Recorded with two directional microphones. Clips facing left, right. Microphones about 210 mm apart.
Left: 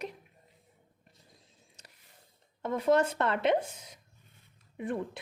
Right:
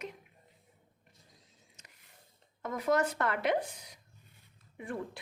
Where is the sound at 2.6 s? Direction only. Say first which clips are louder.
Left 4 dB; 30° left (ahead or behind).